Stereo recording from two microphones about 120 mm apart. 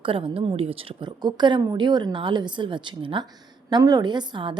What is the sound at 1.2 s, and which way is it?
A woman's voice, 35° right (ahead or behind).